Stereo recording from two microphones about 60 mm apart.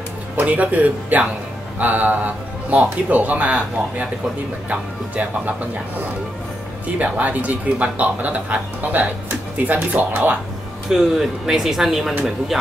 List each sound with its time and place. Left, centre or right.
0.4 s a man's voice: right
7.0 s a man's voice: right
10.9 s speech: centre